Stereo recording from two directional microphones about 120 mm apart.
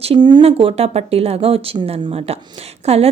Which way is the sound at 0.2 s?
40° right (ahead or behind).